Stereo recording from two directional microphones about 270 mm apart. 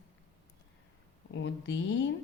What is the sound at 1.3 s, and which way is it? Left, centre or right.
Speech, left.